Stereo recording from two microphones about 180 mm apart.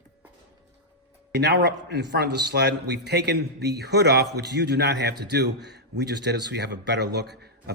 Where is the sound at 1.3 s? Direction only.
70° right (ahead or behind).